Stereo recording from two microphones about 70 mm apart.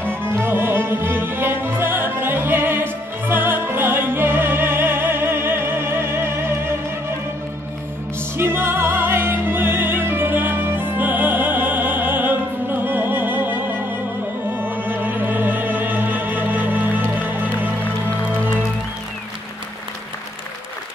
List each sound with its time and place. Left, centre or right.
0.2 s music: right
8.4 s opera: right
14.5 s music: right